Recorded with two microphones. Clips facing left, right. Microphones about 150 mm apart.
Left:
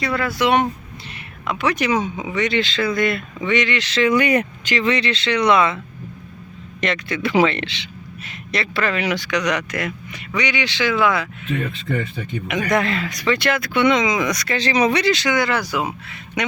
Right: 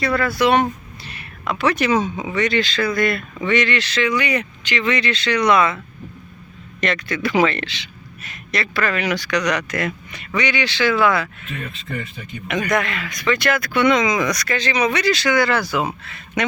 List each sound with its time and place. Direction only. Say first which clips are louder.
0.0 s speech: right 2 dB; 20° left (ahead or behind)
4.0 s speech: left 6 dB; 50° left (ahead or behind); by 5.7 s 25° left (ahead or behind)
6.8 s speech: even; 20° left (ahead or behind)
12.6 s speech: left 3 dB; 30° left (ahead or behind); by 16.4 s 15° left (ahead or behind)